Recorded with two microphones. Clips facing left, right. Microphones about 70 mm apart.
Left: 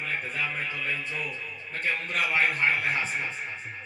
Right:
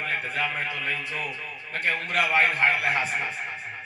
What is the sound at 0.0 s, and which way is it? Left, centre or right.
A man's voice, right.